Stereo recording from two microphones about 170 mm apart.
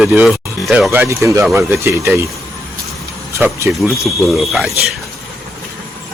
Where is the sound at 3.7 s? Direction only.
Centre (ahead or behind).